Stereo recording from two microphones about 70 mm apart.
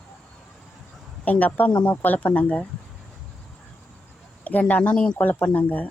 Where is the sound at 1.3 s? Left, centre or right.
Left.